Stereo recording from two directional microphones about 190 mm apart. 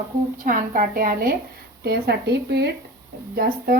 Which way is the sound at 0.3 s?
45° right (ahead or behind).